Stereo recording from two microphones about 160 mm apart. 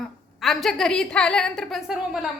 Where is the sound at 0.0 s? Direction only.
Centre (ahead or behind).